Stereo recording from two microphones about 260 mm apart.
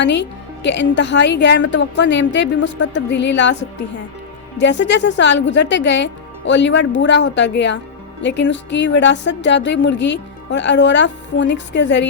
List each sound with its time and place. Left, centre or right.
0.0 s speech: left
4.5 s speech: left